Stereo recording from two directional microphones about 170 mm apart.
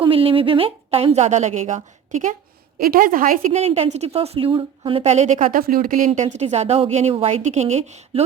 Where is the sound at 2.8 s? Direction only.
55° right (ahead or behind).